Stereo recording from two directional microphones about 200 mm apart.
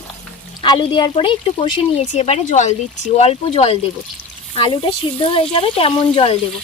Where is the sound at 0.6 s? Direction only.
20° left (ahead or behind).